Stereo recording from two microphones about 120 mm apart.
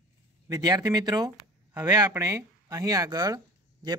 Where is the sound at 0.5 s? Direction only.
35° right (ahead or behind).